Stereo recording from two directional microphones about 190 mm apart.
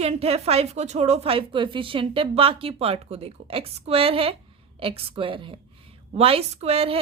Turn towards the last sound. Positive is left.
turn(degrees=-30)  # may be behind; listen again after turning